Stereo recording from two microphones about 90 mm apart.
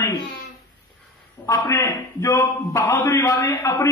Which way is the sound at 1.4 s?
35° left (ahead or behind).